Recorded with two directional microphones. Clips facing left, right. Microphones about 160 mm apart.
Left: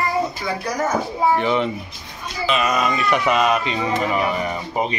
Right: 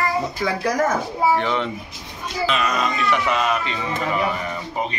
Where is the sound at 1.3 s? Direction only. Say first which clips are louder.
Left 3 dB; 5° left (ahead or behind).